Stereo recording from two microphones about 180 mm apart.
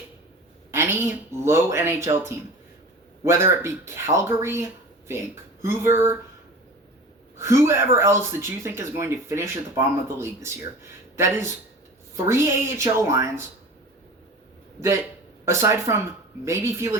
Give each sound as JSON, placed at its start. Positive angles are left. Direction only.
{"t": 0.7, "sound": "a sound", "side_deg": -15}
{"t": 1.5, "sound": "speech", "side_deg": -15}
{"t": 7.3, "sound": "speech", "side_deg": -15}
{"t": 15.4, "sound": "speech", "side_deg": -15}